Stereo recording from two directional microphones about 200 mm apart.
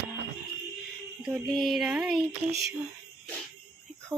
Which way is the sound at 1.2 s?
Centre (ahead or behind).